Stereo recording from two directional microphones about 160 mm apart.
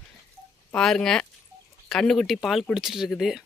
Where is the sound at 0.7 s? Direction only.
5° left (ahead or behind).